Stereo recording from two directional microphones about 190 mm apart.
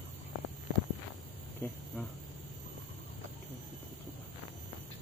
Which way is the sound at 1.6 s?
10° left (ahead or behind).